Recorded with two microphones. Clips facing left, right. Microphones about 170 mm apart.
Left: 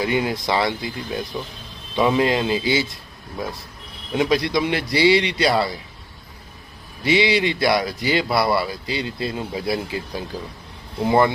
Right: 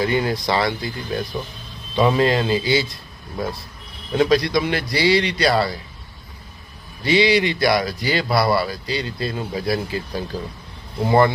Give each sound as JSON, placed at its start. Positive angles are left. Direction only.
{"t": 0.0, "sound": "speech", "side_deg": 15}
{"t": 4.1, "sound": "speech", "side_deg": 20}
{"t": 7.0, "sound": "speech", "side_deg": 20}